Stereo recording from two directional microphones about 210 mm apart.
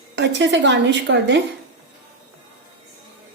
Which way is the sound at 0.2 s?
60° right (ahead or behind).